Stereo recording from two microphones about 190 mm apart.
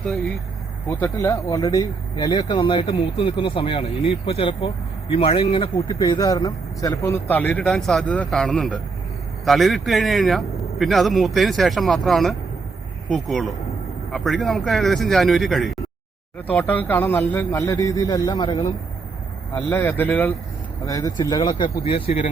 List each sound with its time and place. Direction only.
0.9 s speech: 15° left (ahead or behind)